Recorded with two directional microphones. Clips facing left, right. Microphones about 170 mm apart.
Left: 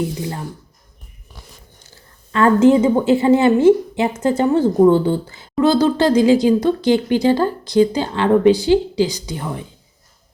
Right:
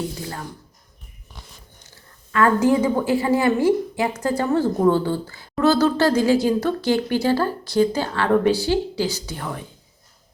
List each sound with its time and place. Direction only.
1.9 s a woman's voice: 25° left (ahead or behind)